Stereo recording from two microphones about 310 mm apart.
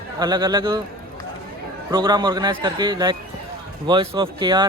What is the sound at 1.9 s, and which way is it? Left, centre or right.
Speech, centre.